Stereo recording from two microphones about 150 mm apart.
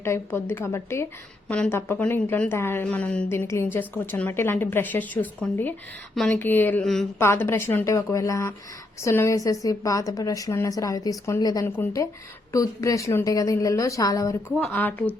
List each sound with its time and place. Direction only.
0.0 s a woman's voice: 15° left (ahead or behind)
7.2 s a woman's voice: 15° left (ahead or behind)
14.5 s a woman's voice: 10° left (ahead or behind)